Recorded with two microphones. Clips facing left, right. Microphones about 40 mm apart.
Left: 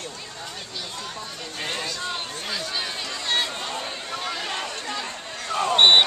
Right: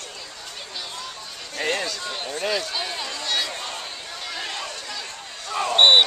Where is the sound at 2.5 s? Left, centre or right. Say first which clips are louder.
Right 2 dB; centre.